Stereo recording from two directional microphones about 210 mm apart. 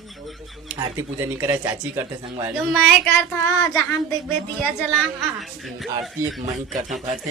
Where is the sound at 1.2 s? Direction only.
10° right (ahead or behind).